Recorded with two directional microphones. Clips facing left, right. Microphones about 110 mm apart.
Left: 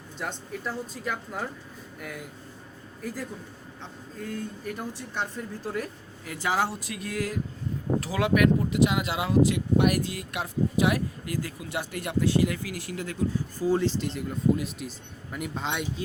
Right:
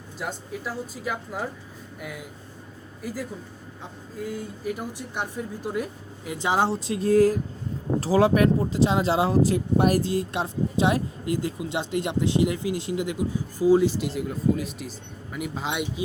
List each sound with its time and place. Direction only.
0.2 s speech: 5° right (ahead or behind)
4.2 s speech: 10° right (ahead or behind)